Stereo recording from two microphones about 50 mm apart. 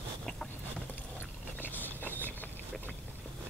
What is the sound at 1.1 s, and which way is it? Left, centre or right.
Biting, left.